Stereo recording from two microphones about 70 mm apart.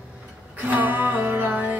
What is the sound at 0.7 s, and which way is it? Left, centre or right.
Music, right.